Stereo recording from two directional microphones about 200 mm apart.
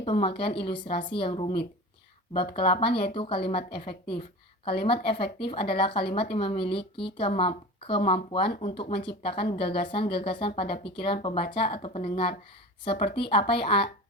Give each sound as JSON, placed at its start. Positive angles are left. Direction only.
{"t": 0.0, "sound": "speech", "side_deg": 30}
{"t": 4.8, "sound": "speech", "side_deg": 25}